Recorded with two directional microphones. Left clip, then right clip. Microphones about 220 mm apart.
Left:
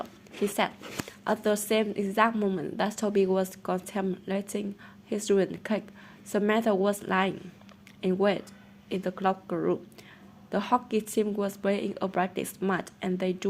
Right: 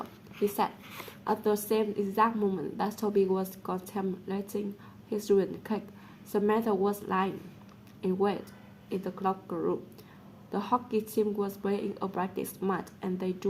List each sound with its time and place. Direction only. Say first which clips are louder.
0.4 s a woman's voice: left 1 dB; 25° left (ahead or behind)